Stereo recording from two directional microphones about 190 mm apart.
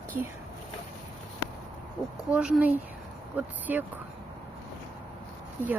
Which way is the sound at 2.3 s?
5° right (ahead or behind).